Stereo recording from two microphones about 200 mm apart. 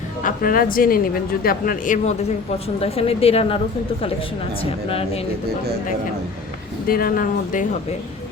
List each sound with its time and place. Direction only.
0.2 s speech: 45° left (ahead or behind)
2.8 s a woman's voice: 30° left (ahead or behind)
4.9 s a woman's voice: 30° left (ahead or behind)
6.8 s speech: 45° left (ahead or behind)